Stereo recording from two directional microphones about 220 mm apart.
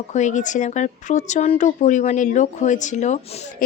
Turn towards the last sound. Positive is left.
turn(degrees=35)  # may be behind; listen again after turning